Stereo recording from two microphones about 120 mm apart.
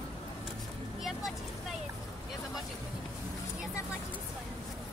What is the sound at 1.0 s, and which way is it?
Vehicle, centre (ahead or behind).